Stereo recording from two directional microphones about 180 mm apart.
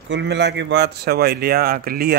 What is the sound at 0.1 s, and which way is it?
Speech, 75° right (ahead or behind).